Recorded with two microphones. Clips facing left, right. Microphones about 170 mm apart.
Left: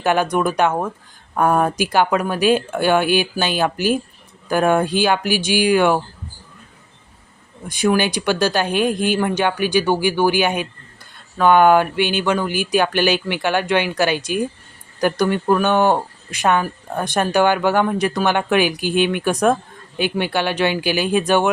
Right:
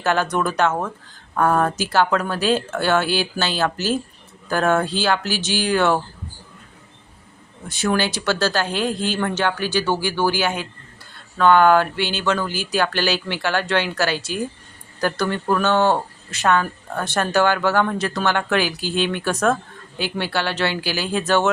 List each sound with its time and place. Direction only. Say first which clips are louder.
0.0 s speech: left 3 dB; 15° left (ahead or behind)
7.7 s speech: left 4 dB; 15° left (ahead or behind)